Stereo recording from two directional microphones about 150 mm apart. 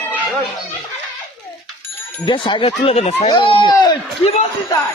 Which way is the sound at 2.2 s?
35° left (ahead or behind).